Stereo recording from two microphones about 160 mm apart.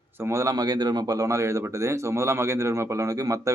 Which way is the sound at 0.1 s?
15° right (ahead or behind).